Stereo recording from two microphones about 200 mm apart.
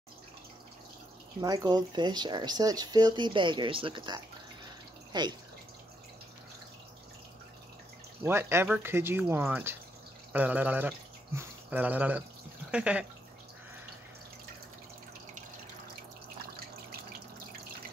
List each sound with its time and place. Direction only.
1.4 s speech: 20° right (ahead or behind)
8.2 s speech: 10° right (ahead or behind)
12.7 s a sound: 5° right (ahead or behind)